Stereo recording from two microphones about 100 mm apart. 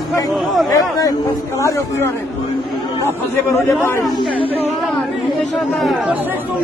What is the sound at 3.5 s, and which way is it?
Speech, 30° left (ahead or behind).